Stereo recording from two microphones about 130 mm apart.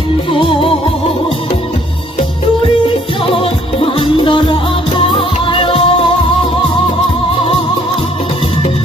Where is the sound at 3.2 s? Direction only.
45° left (ahead or behind).